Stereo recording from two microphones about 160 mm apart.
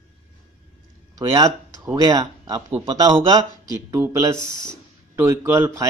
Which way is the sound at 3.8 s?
15° right (ahead or behind).